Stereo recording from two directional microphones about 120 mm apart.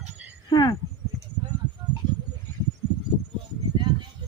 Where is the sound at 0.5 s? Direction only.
35° left (ahead or behind).